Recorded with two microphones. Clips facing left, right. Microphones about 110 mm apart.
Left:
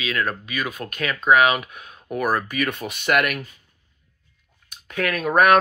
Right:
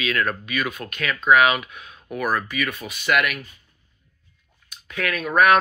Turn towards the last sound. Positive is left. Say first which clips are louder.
# left 1 dB
turn(degrees=45)  # may be behind; listen again after turning